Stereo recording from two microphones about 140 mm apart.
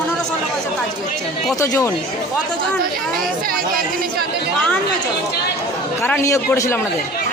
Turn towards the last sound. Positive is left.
turn(degrees=20)  # may be behind; listen again after turning